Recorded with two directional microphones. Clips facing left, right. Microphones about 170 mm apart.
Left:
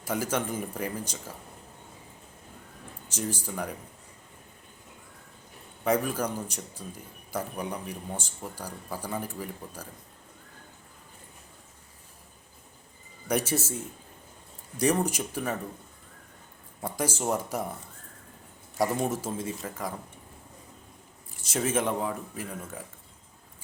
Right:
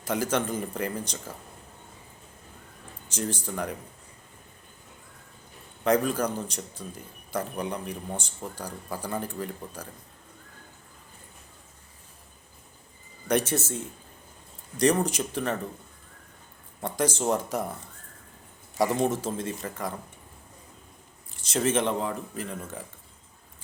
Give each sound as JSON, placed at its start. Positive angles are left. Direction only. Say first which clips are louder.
{"t": 0.0, "sound": "speech", "louder": "right 2 dB", "side_deg": 5}
{"t": 3.1, "sound": "speech", "louder": "right 2 dB", "side_deg": 5}
{"t": 5.8, "sound": "speech", "louder": "right 3 dB", "side_deg": 5}
{"t": 13.2, "sound": "speech", "louder": "right 2 dB", "side_deg": 5}
{"t": 14.8, "sound": "speech", "louder": "right 2 dB", "side_deg": 5}
{"t": 16.8, "sound": "speech", "louder": "right 3 dB", "side_deg": 5}
{"t": 18.9, "sound": "speech", "louder": "right 3 dB", "side_deg": 5}
{"t": 21.4, "sound": "speech", "louder": "right 2 dB", "side_deg": 5}